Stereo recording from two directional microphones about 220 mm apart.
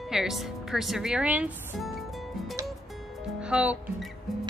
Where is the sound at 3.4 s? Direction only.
5° right (ahead or behind).